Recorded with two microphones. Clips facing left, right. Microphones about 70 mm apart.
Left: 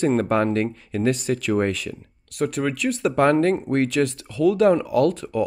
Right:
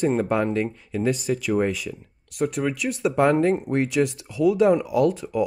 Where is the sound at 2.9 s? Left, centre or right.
Centre.